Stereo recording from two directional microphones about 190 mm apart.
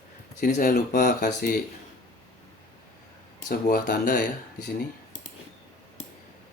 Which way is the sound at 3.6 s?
50° left (ahead or behind).